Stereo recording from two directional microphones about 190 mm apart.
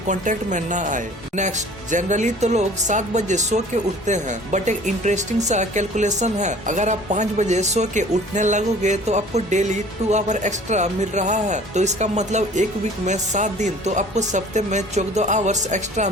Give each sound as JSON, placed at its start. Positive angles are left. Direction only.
{"t": 0.1, "sound": "speech", "side_deg": -40}